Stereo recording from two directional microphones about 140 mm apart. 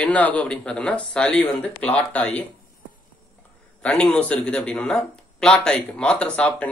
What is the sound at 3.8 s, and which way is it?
Speech, 5° left (ahead or behind).